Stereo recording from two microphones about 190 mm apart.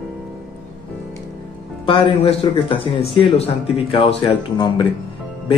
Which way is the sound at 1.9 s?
30° left (ahead or behind).